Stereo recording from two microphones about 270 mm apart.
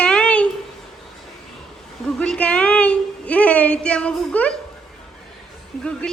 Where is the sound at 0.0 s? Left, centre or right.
Centre.